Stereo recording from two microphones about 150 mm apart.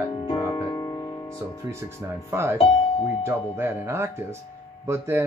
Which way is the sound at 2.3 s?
15° right (ahead or behind).